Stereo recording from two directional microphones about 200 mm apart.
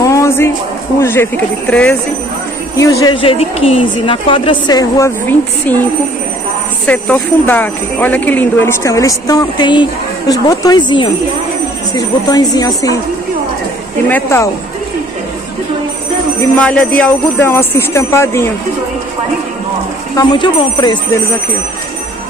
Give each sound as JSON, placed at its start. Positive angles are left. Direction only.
{"t": 0.0, "sound": "music", "side_deg": 15}
{"t": 0.9, "sound": "speech", "side_deg": 10}
{"t": 2.8, "sound": "speech", "side_deg": 15}
{"t": 6.9, "sound": "speech", "side_deg": 10}
{"t": 14.0, "sound": "speech", "side_deg": 10}
{"t": 16.5, "sound": "speech", "side_deg": 5}
{"t": 20.2, "sound": "speech", "side_deg": 25}